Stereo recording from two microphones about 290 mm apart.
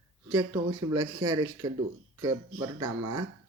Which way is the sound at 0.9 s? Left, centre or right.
Centre.